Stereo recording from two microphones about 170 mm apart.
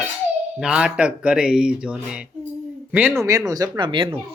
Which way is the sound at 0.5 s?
5° right (ahead or behind).